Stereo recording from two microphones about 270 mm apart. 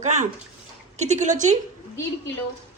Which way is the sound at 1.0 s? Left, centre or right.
Right.